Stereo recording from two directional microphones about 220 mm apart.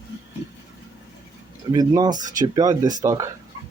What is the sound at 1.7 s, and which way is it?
Speech, 15° right (ahead or behind).